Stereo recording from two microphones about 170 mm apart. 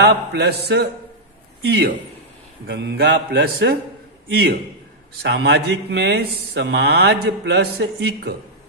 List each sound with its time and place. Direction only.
0.0 s mantra: 75° right (ahead or behind)
1.6 s a man's voice: 70° right (ahead or behind)
2.7 s mantra: 75° right (ahead or behind)
5.2 s speech: 85° right